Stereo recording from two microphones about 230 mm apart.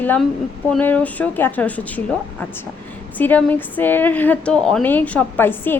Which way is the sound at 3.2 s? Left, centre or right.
Centre.